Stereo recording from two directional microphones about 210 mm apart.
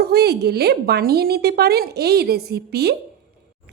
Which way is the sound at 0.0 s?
50° right (ahead or behind).